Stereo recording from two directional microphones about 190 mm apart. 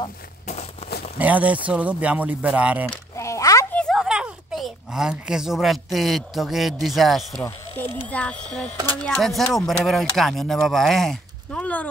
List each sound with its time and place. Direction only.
1.1 s speech: 10° right (ahead or behind)
3.2 s a sound: 15° left (ahead or behind)
3.7 s speech: centre (ahead or behind)
7.4 s speech: 10° left (ahead or behind)